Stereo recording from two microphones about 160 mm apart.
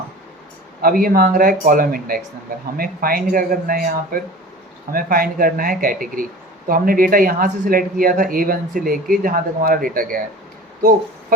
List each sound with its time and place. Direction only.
0.8 s speech: 65° right (ahead or behind)